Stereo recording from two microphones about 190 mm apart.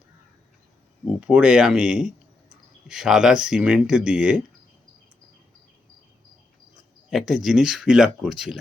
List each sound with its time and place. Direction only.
1.2 s speech: 5° right (ahead or behind)
7.1 s speech: centre (ahead or behind)